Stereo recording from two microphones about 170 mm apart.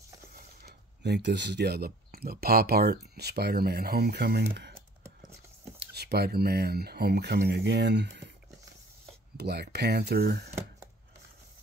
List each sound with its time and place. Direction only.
0.3 s speech: 65° right (ahead or behind); by 4.7 s 85° right
5.8 s speech: 70° right (ahead or behind); by 8.3 s 90° right
9.4 s speech: 70° right (ahead or behind)